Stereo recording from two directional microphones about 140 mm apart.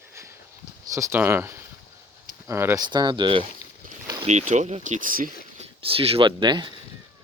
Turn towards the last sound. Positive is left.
turn(degrees=-35)  # may be behind; listen again after turning